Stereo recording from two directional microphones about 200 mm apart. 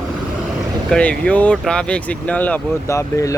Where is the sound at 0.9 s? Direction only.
5° left (ahead or behind).